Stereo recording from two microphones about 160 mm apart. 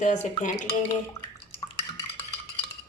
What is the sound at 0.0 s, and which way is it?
Speech, 50° left (ahead or behind).